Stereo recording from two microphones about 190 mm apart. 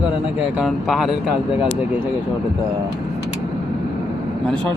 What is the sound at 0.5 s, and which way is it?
Speech, centre (ahead or behind).